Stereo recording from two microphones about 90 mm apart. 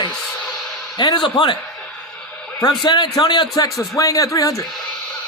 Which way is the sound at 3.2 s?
60° left (ahead or behind).